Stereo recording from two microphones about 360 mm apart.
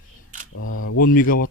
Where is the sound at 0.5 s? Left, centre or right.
Left.